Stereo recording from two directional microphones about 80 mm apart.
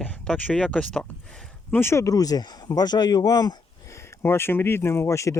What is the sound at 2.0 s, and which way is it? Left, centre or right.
Speech, left.